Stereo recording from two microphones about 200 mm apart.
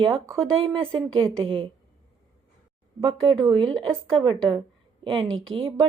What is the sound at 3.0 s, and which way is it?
A woman's voice, 25° right (ahead or behind).